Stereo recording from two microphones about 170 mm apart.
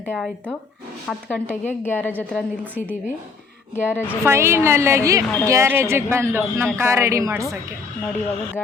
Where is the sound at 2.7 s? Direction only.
10° right (ahead or behind).